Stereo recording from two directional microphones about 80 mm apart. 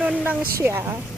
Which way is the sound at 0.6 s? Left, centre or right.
Right.